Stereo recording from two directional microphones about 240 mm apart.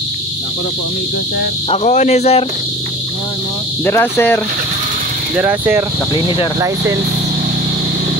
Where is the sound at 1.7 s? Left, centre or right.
Left.